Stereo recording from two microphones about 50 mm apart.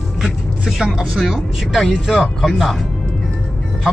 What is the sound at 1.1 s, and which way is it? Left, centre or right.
A man's voice, centre.